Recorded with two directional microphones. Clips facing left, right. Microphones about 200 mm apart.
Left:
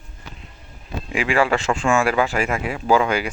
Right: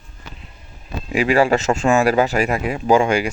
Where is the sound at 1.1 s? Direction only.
40° right (ahead or behind).